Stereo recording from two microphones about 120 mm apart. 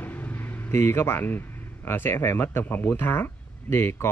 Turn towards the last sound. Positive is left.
turn(degrees=20)  # may be behind; listen again after turning